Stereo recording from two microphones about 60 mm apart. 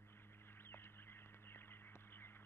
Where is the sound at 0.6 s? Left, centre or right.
Left.